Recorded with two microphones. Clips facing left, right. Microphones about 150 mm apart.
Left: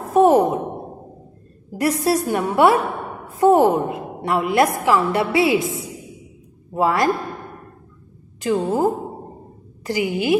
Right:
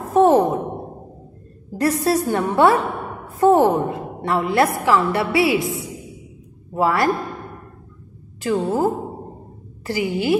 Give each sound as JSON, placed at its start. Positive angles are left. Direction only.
{"t": 0.1, "sound": "a woman's voice", "side_deg": 15}
{"t": 1.7, "sound": "a woman's voice", "side_deg": 15}
{"t": 6.7, "sound": "a woman's voice", "side_deg": 20}
{"t": 8.4, "sound": "a woman's voice", "side_deg": 15}